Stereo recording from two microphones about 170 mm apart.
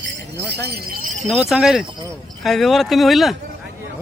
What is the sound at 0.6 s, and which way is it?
Speech, 65° right (ahead or behind).